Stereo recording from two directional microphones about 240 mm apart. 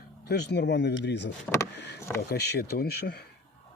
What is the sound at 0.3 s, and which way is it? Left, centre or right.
Speech, left.